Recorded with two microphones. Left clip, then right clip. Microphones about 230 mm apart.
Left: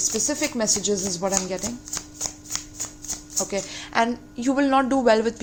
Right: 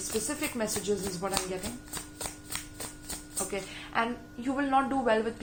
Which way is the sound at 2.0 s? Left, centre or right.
Left.